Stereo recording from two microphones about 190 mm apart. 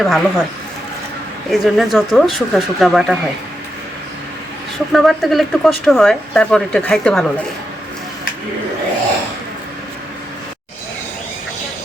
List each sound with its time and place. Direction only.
0.0 s speech: centre (ahead or behind)
1.5 s speech: centre (ahead or behind)
4.9 s speech: centre (ahead or behind)